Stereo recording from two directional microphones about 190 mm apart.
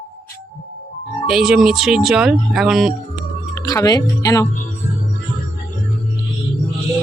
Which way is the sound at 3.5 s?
20° left (ahead or behind).